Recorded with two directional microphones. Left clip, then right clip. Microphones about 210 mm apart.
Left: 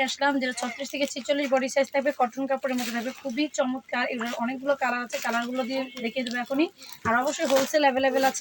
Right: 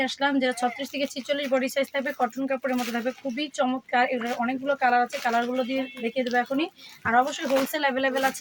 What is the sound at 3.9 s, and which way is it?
Speech, 10° right (ahead or behind).